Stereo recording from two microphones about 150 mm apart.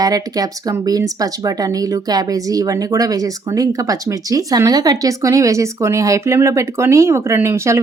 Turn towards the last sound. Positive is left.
turn(degrees=-20)  # may be behind; listen again after turning